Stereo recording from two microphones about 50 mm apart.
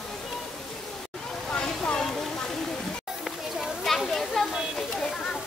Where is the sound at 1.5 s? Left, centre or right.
Left.